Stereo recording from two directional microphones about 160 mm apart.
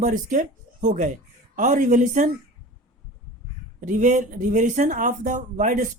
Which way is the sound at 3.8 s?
50° right (ahead or behind).